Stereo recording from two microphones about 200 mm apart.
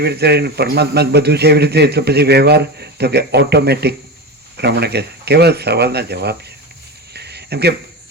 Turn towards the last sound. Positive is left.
turn(degrees=-55)  # may be behind; listen again after turning